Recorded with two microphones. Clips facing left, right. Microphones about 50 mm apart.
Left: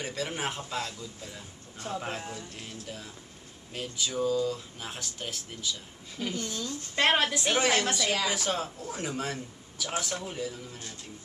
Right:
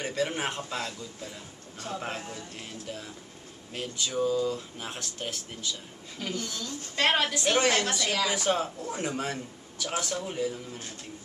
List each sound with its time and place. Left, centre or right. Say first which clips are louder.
0.0 s a woman's voice: right 3 dB; centre
6.3 s speech: left 1 dB; left
7.1 s a woman's voice: right 1 dB; centre